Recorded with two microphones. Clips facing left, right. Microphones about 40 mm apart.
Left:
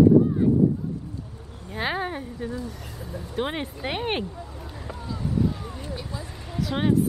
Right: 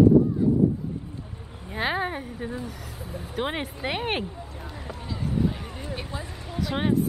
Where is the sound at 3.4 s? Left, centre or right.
Centre.